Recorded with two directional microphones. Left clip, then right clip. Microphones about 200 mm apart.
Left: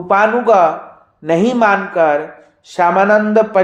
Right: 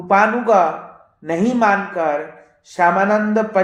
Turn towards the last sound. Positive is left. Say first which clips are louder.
# left 5 dB
turn(degrees=25)  # may be behind; listen again after turning